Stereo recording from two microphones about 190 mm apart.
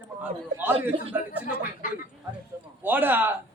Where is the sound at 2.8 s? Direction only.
10° right (ahead or behind).